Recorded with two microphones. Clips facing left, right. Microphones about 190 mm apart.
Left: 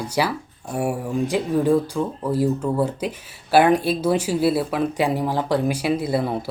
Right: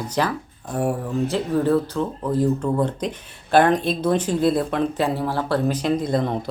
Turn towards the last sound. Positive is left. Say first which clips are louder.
# even
turn(degrees=5)  # may be behind; listen again after turning